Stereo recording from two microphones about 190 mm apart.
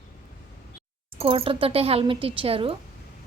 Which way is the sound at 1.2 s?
30° right (ahead or behind).